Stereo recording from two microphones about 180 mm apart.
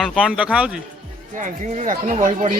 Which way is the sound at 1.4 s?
45° right (ahead or behind).